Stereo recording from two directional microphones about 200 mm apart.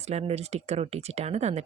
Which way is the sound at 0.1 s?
30° right (ahead or behind).